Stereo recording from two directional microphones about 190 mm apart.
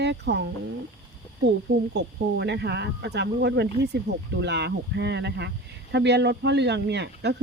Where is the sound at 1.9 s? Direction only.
65° right (ahead or behind).